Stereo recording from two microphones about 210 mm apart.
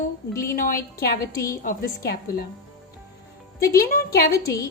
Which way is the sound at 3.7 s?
45° left (ahead or behind).